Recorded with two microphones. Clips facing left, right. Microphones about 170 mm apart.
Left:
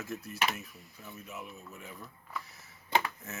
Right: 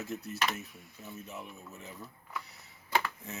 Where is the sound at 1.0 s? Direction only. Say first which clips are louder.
Right 1 dB; 25° right (ahead or behind).